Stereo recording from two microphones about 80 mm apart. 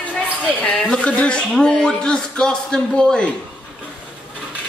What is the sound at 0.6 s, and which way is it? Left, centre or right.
A man's voice, centre.